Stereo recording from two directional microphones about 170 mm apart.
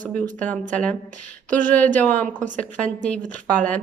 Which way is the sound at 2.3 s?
50° right (ahead or behind).